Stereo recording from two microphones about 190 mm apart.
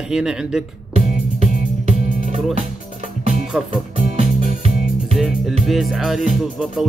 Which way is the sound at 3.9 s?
35° right (ahead or behind).